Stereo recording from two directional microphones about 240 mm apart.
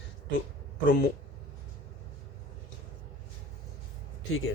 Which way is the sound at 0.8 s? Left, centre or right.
Left.